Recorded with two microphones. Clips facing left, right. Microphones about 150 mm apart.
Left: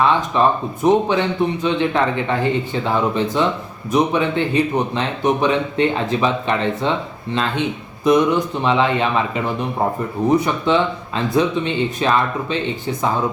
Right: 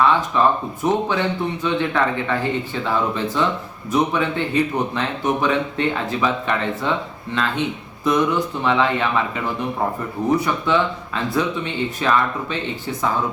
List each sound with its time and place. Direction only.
0.0 s a man's voice: 20° left (ahead or behind)
8.0 s a man's voice: 20° left (ahead or behind)